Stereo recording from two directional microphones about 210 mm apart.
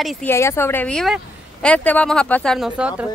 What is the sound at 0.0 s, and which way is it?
Speech, centre (ahead or behind).